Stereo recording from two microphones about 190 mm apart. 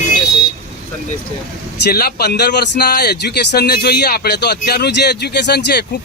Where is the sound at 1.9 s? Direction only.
55° left (ahead or behind).